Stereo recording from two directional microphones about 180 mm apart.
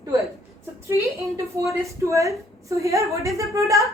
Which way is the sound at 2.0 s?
15° right (ahead or behind).